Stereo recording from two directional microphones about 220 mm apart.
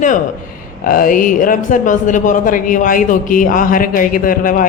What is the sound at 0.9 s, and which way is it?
A woman's voice, 40° left (ahead or behind).